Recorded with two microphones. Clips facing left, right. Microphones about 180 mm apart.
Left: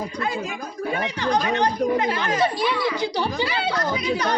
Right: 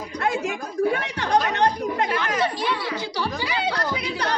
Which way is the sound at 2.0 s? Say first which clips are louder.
Left 1 dB; 25° left (ahead or behind).